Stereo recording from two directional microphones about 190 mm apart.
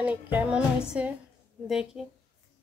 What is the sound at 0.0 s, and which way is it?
Music, 10° right (ahead or behind).